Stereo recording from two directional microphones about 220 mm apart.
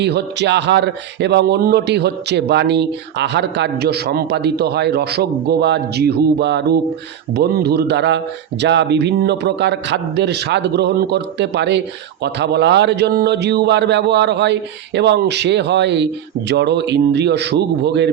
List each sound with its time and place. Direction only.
0.0 s speech: 50° right (ahead or behind)